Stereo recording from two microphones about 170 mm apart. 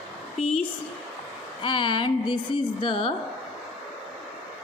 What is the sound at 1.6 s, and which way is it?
A woman's voice, 30° left (ahead or behind).